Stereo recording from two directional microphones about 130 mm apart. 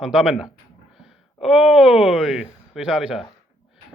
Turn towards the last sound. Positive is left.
turn(degrees=-5)  # may be behind; listen again after turning